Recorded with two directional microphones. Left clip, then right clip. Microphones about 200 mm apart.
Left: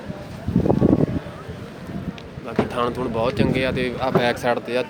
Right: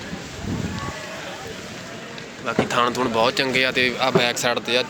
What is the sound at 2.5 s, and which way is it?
Speech, centre (ahead or behind).